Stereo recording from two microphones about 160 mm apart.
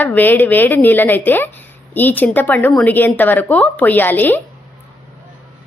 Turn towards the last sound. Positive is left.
turn(degrees=10)  # may be behind; listen again after turning